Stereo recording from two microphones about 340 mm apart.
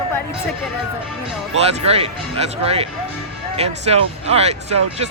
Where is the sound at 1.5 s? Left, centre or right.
Centre.